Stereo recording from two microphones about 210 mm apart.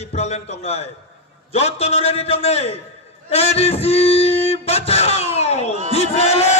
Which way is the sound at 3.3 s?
30° left (ahead or behind).